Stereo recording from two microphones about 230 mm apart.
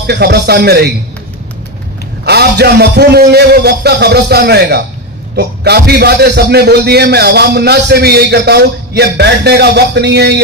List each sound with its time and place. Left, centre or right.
0.0 s a man's voice: right
2.2 s a man's voice: right